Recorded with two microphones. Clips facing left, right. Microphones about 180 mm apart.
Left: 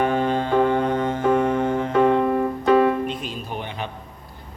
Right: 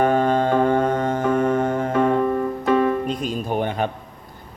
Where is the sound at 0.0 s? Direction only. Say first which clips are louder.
Right 3 dB; 45° right (ahead or behind).